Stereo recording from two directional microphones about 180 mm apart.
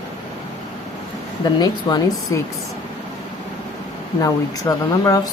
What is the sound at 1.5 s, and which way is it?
Speech, 20° left (ahead or behind).